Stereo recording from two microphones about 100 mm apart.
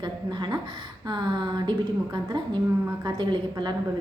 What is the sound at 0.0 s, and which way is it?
A woman's voice, 50° right (ahead or behind).